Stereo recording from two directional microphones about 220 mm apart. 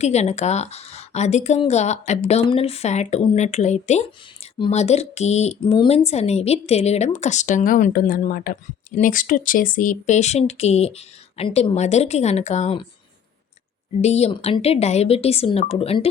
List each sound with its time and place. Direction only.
0.0 s a woman's voice: 30° left (ahead or behind)
14.0 s speech: 30° left (ahead or behind)